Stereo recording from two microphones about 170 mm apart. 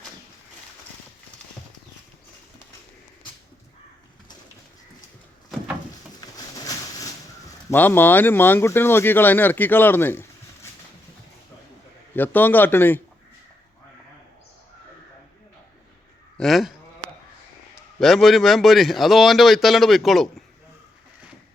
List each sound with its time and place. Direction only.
6.1 s a sound: 20° left (ahead or behind)
7.7 s speech: 10° left (ahead or behind)
12.1 s speech: 10° left (ahead or behind)
16.4 s a man's voice: centre (ahead or behind)
18.0 s a man's voice: centre (ahead or behind)